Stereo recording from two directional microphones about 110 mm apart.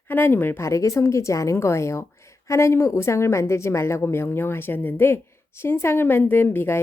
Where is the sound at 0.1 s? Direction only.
20° left (ahead or behind).